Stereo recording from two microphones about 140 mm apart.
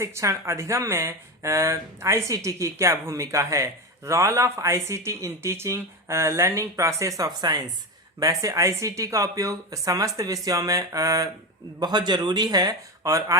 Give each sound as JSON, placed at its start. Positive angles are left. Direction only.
{"t": 0.0, "sound": "speech", "side_deg": -20}